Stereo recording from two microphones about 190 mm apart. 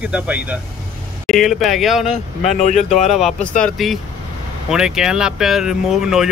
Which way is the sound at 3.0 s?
Centre (ahead or behind).